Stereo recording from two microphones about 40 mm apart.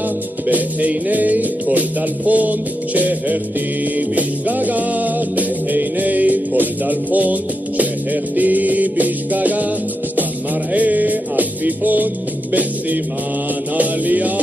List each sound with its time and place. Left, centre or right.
0.5 s music: right
10.7 s music: right
13.7 s music: right